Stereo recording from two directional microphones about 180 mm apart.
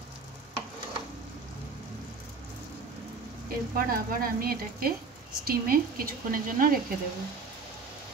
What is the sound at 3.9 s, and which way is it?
Speech, 55° right (ahead or behind).